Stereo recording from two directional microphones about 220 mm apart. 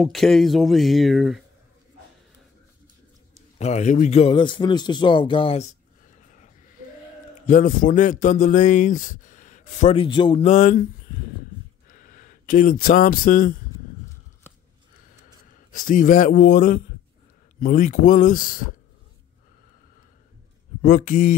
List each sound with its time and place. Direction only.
0.0 s speech: centre (ahead or behind)
3.5 s a man's voice: 30° left (ahead or behind)
15.7 s speech: 35° left (ahead or behind)
20.8 s speech: 35° left (ahead or behind)